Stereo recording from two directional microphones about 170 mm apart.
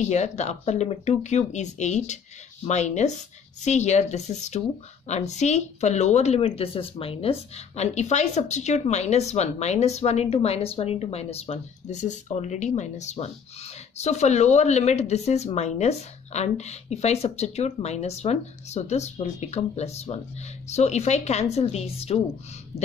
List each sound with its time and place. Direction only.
0.0 s speech: 40° left (ahead or behind)